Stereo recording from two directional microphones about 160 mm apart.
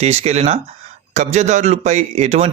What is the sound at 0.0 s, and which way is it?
A man's voice, 40° right (ahead or behind).